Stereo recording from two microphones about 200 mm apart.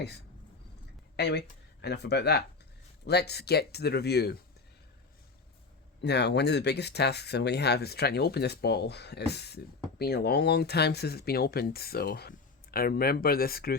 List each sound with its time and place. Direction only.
1.1 s speech: 55° left (ahead or behind)
6.0 s speech: 55° left (ahead or behind)